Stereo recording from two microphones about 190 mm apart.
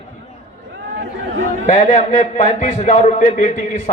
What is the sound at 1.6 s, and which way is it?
A man's voice, 40° left (ahead or behind).